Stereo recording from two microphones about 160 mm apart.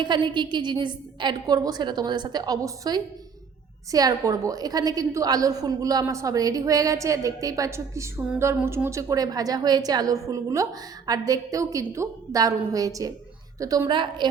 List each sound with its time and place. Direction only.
0.0 s a woman's voice: 30° right (ahead or behind)